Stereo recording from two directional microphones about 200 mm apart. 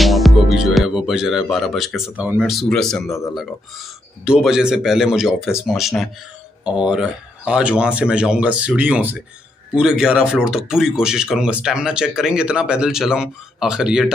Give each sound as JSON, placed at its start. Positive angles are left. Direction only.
{"t": 0.0, "sound": "speech", "side_deg": 0}
{"t": 3.1, "sound": "speech", "side_deg": 15}
{"t": 4.2, "sound": "speech", "side_deg": -5}